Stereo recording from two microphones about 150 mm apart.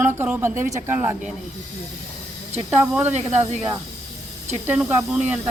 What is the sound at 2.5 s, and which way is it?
Speech, 10° right (ahead or behind).